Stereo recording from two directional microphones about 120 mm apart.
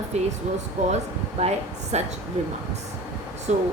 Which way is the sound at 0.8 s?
80° right.